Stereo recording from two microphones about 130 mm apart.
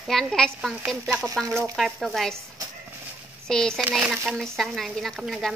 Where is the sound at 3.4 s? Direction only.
5° left (ahead or behind).